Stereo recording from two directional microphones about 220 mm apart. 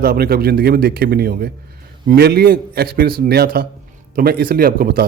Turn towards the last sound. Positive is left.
turn(degrees=-45)  # may be behind; listen again after turning